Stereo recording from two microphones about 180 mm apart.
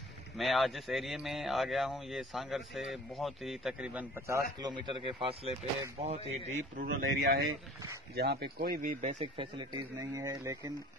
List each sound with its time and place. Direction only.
0.4 s speech: centre (ahead or behind)
4.6 s a man's voice: 25° right (ahead or behind)
6.8 s speech: 55° right (ahead or behind)
9.2 s speech: 25° right (ahead or behind)